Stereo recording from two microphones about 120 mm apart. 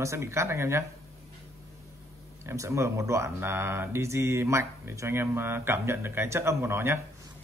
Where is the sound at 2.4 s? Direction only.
25° right (ahead or behind).